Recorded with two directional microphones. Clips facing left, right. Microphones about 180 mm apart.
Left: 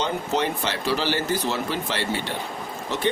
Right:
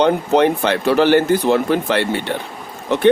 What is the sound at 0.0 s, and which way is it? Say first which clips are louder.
Speech: right 11 dB; 60° right (ahead or behind).